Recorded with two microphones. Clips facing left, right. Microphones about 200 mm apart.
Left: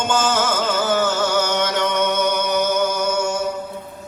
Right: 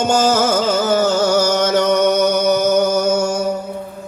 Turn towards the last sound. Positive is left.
turn(degrees=-40)  # may be behind; listen again after turning